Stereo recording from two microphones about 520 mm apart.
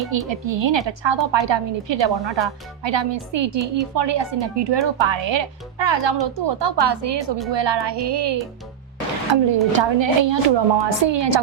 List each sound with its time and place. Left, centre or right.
0.1 s a woman's voice: right